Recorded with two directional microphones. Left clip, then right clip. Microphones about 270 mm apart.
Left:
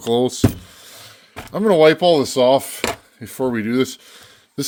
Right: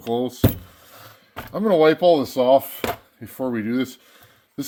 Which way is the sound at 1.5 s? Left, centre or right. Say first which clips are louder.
Left 4 dB; left.